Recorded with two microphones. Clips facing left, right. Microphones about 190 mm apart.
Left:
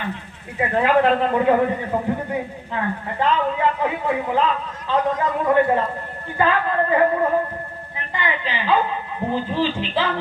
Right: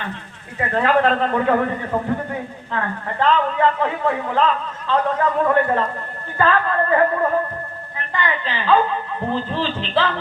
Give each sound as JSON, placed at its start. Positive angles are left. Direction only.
{"t": 0.6, "sound": "a man's voice", "side_deg": 15}